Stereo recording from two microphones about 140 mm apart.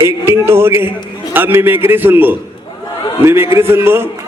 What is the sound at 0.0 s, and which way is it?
A man's voice, 20° right (ahead or behind).